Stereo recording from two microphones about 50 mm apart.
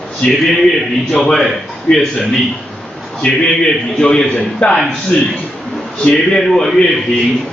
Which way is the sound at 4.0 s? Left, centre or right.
Centre.